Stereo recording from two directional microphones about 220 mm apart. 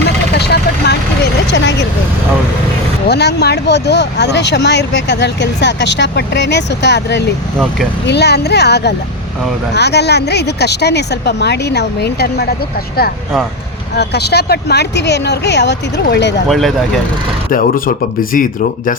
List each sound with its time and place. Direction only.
0.3 s vehicle: 50° left (ahead or behind)
3.1 s speech: 50° left (ahead or behind)
16.5 s speech: centre (ahead or behind)
17.5 s speech: 40° left (ahead or behind)